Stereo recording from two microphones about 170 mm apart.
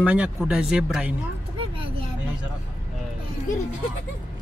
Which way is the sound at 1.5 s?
30° right (ahead or behind).